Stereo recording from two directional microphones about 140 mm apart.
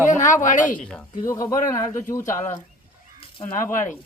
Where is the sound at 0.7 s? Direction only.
5° left (ahead or behind).